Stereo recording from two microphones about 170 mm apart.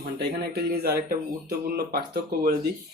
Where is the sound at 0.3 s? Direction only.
70° right (ahead or behind).